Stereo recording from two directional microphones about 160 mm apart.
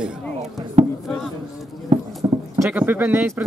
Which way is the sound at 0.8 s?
40° right (ahead or behind).